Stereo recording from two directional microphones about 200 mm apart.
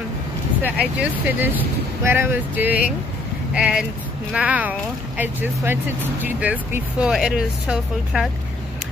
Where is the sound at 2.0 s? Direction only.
10° right (ahead or behind).